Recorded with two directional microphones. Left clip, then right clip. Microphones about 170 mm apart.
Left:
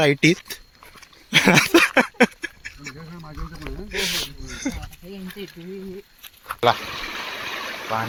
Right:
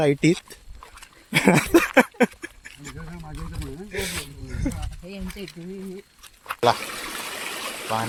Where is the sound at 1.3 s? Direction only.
15° right (ahead or behind).